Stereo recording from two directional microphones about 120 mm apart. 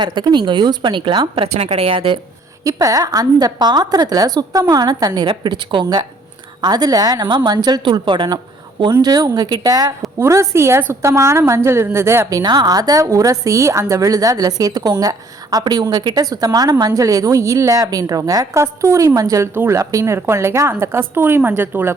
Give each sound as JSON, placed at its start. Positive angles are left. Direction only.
{"t": 0.0, "sound": "a woman's voice", "side_deg": -40}
{"t": 1.5, "sound": "a woman's voice", "side_deg": -65}
{"t": 2.6, "sound": "a woman's voice", "side_deg": -30}
{"t": 12.4, "sound": "a woman's voice", "side_deg": -35}